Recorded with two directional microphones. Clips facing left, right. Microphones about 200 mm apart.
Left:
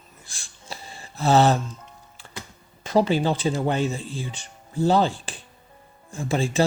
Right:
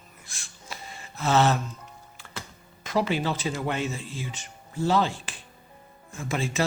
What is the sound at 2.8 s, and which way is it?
Speech, 30° left (ahead or behind).